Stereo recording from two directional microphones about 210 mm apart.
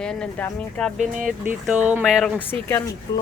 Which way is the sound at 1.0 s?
35° right (ahead or behind).